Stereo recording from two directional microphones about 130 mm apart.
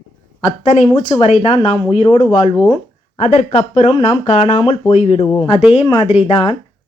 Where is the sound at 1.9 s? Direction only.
50° left (ahead or behind).